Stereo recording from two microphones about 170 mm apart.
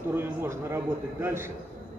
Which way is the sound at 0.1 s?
15° right (ahead or behind).